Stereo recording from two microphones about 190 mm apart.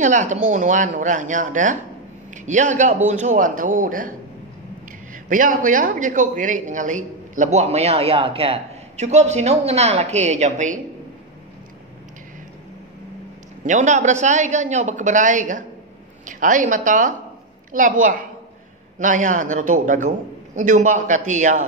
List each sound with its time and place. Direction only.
0.0 s a man's voice: 40° right (ahead or behind)
5.1 s a man's voice: 45° right (ahead or behind)
13.7 s a man's voice: 40° right (ahead or behind)
18.9 s a man's voice: 40° right (ahead or behind)